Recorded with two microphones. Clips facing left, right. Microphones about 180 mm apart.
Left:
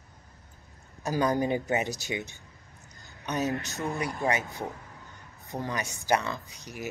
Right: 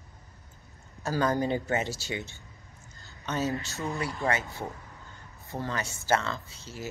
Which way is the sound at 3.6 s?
15° left (ahead or behind).